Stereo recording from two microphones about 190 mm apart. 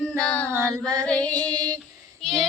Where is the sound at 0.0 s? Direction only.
5° left (ahead or behind).